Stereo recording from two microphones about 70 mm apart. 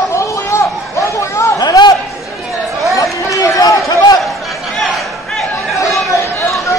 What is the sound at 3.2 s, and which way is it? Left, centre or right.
Run, left.